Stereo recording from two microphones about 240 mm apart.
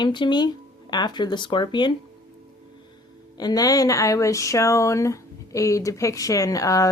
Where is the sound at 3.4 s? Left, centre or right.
Centre.